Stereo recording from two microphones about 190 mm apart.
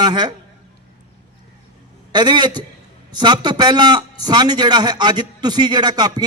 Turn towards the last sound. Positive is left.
turn(degrees=-20)  # may be behind; listen again after turning